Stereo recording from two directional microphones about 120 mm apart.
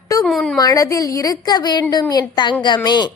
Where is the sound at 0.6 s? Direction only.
30° left (ahead or behind).